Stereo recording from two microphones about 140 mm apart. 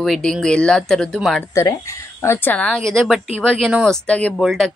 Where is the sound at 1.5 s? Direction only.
20° left (ahead or behind).